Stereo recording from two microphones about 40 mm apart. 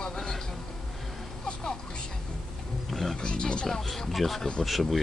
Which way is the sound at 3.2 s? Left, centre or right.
Left.